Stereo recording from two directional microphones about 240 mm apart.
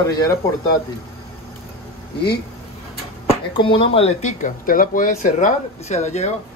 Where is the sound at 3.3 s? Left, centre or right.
Left.